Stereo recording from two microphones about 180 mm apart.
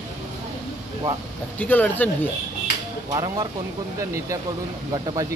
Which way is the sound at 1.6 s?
10° left (ahead or behind).